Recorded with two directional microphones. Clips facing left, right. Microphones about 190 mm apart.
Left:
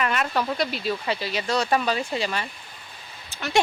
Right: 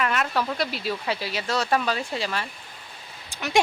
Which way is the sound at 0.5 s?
5° right (ahead or behind).